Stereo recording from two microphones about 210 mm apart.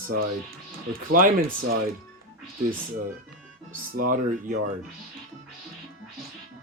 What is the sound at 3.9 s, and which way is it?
Speech, 40° right (ahead or behind).